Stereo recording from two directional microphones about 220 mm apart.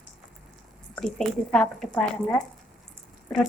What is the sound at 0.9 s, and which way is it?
Speech, 5° left (ahead or behind).